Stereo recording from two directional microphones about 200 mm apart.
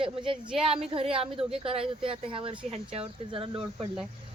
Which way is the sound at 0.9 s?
30° right (ahead or behind).